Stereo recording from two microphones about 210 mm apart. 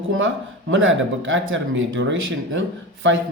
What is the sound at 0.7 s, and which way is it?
Speech, 65° right (ahead or behind).